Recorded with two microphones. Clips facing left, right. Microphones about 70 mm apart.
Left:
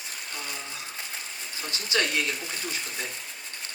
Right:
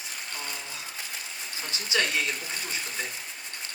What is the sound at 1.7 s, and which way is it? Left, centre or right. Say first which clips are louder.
Speech: left 1 dB; right.